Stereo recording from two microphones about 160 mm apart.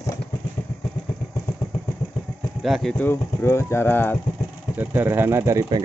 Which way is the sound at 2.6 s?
Centre (ahead or behind).